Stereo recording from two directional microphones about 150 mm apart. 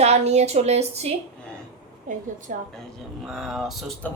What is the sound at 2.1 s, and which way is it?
Speech, 60° right (ahead or behind).